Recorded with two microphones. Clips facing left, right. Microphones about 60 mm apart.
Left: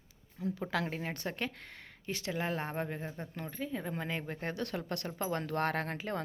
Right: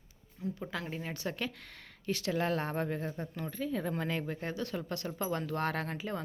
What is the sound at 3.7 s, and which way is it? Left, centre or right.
Speech, centre.